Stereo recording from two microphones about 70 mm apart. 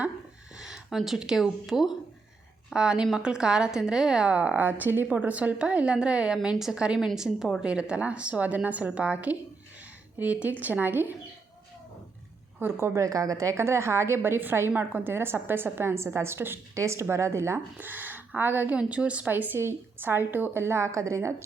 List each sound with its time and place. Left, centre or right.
0.5 s a woman's voice: centre; by 11.1 s right
12.5 s a woman's voice: right
13.1 s a woman's voice: right
17.7 s a woman's voice: right
21.2 s a woman's voice: right